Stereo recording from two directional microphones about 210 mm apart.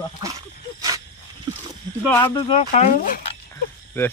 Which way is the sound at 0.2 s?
15° right (ahead or behind).